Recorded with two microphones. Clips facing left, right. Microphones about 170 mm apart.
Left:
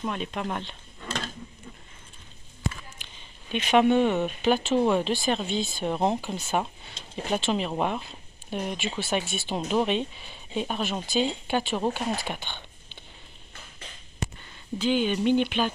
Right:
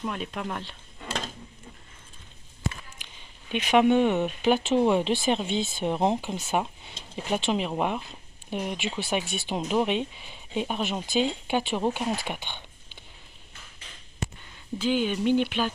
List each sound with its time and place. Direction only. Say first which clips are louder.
0.0 s speech: left 1 dB; 5° right (ahead or behind)
3.0 s a sound: left 1 dB; 15° right (ahead or behind)
3.5 s speech: even; 10° right (ahead or behind)
14.8 s speech: left 1 dB; 5° right (ahead or behind)